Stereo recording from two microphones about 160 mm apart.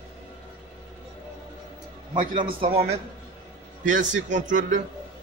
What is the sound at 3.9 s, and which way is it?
Speech, 50° right (ahead or behind).